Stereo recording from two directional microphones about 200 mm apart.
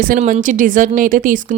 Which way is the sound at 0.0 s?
40° right (ahead or behind).